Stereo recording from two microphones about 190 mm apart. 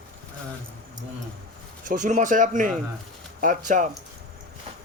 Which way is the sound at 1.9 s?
40° right (ahead or behind).